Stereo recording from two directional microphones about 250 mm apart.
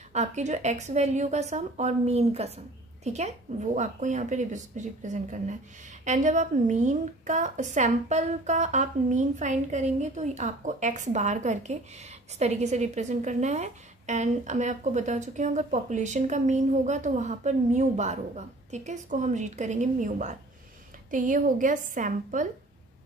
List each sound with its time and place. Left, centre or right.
0.1 s a woman's voice: right